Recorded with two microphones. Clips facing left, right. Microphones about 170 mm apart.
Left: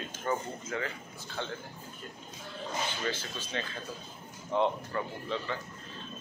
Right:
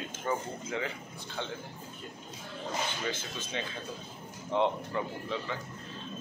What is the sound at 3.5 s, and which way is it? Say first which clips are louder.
Speech: even; 15° right (ahead or behind).